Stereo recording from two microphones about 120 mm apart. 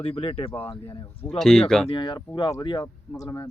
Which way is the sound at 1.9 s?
40° left (ahead or behind).